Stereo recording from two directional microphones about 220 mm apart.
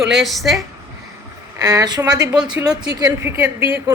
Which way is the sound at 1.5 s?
15° right (ahead or behind).